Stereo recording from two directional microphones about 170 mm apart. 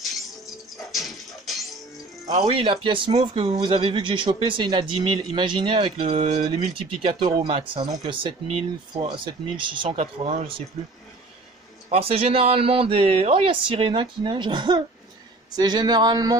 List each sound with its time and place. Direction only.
0.9 s music: centre (ahead or behind)
2.3 s speech: 35° right (ahead or behind)
9.8 s speech: 40° right (ahead or behind)
11.9 s speech: 35° right (ahead or behind)